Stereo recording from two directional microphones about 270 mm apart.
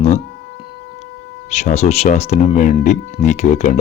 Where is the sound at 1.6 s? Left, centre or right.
Left.